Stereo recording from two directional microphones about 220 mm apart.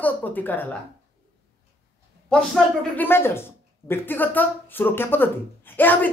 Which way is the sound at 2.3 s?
5° left (ahead or behind).